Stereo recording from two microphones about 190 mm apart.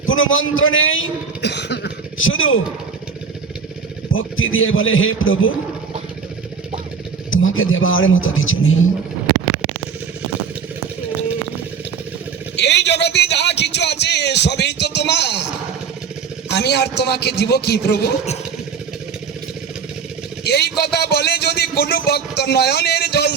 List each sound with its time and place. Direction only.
0.0 s a man's voice: 90° left
4.1 s speech: 90° left
7.3 s speech: 90° left
12.5 s a sound: 65° left (ahead or behind)
16.5 s a man's voice: 60° left (ahead or behind)
20.4 s a man's voice: 60° left (ahead or behind)